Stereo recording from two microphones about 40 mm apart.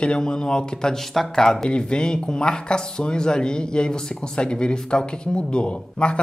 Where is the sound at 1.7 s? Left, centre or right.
Left.